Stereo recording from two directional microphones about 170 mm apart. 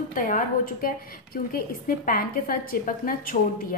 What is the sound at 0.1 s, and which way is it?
Speech, 55° left (ahead or behind).